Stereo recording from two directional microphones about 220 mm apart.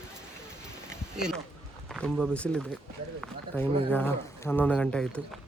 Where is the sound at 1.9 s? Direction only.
5° left (ahead or behind).